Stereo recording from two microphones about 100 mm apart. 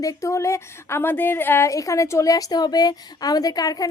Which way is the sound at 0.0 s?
35° left (ahead or behind).